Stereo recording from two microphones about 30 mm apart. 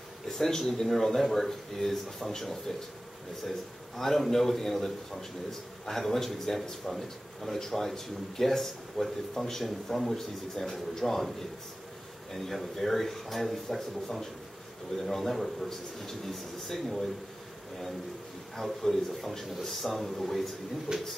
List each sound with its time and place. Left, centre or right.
0.3 s a man's voice: centre
12.4 s a man's voice: centre
18.6 s a man's voice: centre
20.9 s speech: right